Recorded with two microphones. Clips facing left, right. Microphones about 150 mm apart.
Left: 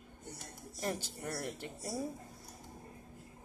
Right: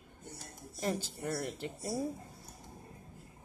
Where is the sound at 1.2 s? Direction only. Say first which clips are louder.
Right 4 dB; 15° right (ahead or behind).